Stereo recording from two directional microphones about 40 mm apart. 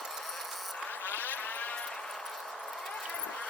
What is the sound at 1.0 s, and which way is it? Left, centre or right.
Vehicle, left.